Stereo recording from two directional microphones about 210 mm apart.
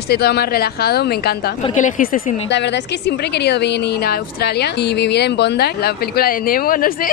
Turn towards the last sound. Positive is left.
turn(degrees=40)  # may be behind; listen again after turning